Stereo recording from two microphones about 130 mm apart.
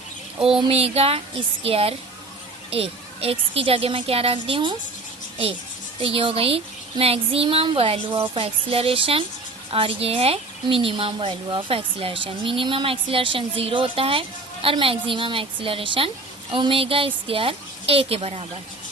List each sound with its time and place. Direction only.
0.4 s speech: 45° right (ahead or behind)
6.0 s speech: 45° right (ahead or behind)